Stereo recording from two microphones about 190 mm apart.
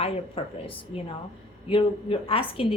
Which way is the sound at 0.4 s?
30° left (ahead or behind).